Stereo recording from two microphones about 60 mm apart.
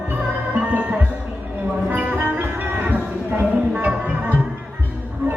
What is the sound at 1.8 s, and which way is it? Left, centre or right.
Music, right.